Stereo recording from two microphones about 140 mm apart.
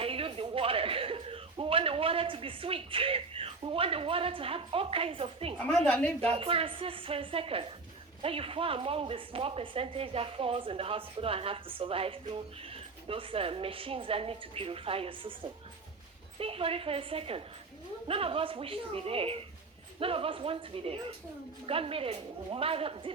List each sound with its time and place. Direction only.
0.0 s speech: 40° right (ahead or behind)
5.5 s a woman's voice: 10° left (ahead or behind)
6.2 s speech: 45° right (ahead or behind)
16.4 s speech: 40° right (ahead or behind)